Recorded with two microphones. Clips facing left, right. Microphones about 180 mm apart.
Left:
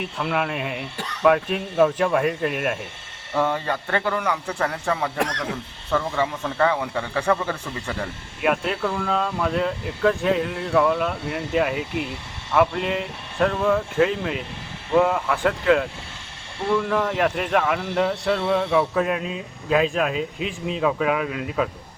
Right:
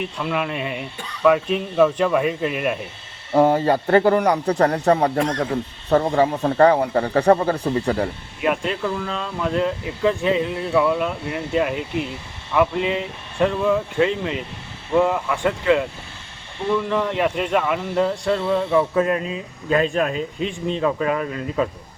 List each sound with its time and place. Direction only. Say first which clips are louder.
0.0 s speech: right 1 dB; centre (ahead or behind)
3.3 s speech: right 7 dB; 35° right (ahead or behind)
8.4 s speech: even; centre (ahead or behind)
16.9 s speech: right 1 dB; centre (ahead or behind)